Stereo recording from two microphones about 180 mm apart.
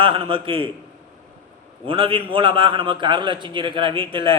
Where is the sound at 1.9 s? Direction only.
30° right (ahead or behind).